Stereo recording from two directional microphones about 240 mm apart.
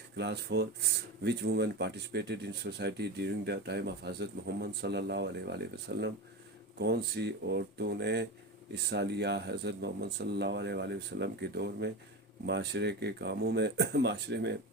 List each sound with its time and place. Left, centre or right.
0.2 s speech: right